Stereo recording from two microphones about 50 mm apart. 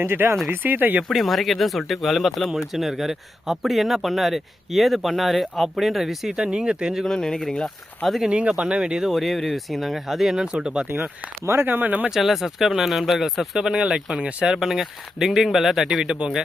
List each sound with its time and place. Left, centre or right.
0.0 s speech: right
1.1 s speech: centre
6.3 s speech: centre
7.0 s speech: centre
8.2 s speech: centre
9.0 s speech: centre
10.3 s speech: centre
11.4 s speech: right
11.7 s speech: right
12.0 s speech: centre
13.6 s speech: centre
14.5 s speech: centre